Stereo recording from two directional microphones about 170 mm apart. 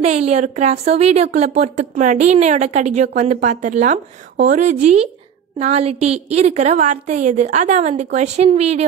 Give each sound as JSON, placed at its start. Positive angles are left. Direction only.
{"t": 0.0, "sound": "a woman's voice", "side_deg": -40}